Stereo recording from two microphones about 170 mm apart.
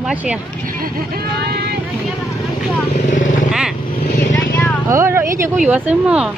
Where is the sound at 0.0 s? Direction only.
5° right (ahead or behind).